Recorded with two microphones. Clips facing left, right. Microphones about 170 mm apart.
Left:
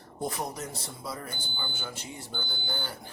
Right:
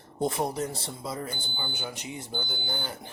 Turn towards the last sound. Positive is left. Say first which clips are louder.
# right 2 dB
turn(degrees=-20)  # may be behind; listen again after turning